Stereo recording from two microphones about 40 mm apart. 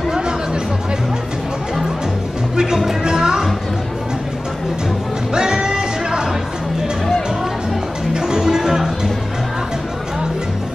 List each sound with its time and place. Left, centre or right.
2.5 s music: centre
5.3 s music: centre
8.1 s music: centre